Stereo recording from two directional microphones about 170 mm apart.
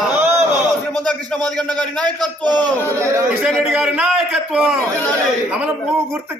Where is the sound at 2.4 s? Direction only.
25° right (ahead or behind).